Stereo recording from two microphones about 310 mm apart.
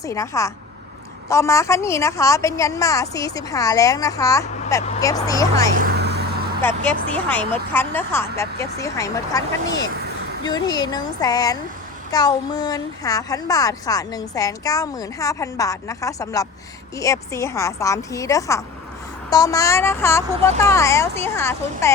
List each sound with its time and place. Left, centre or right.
0.0 s a woman's voice: centre
5.8 s vehicle: right
6.6 s a woman's voice: centre